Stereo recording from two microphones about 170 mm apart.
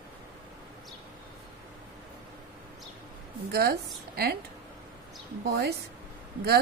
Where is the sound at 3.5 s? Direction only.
70° right (ahead or behind).